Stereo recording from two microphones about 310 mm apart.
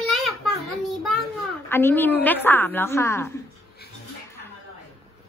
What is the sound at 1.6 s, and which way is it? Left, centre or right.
A woman's voice, centre.